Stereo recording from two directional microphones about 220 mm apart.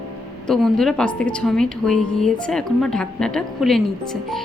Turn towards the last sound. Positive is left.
turn(degrees=0)  # may be behind; listen again after turning